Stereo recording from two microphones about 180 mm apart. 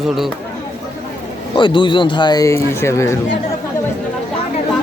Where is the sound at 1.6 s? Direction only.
25° left (ahead or behind).